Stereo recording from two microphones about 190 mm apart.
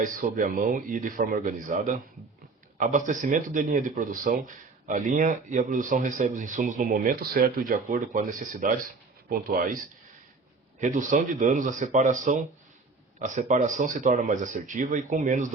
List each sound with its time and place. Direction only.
0.2 s speech: 45° right (ahead or behind)
10.8 s speech: 40° right (ahead or behind)